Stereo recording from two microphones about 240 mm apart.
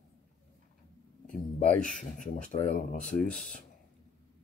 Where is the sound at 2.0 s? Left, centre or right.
Left.